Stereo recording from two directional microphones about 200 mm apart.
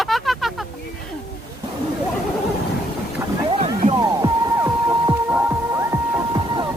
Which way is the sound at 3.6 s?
20° right (ahead or behind).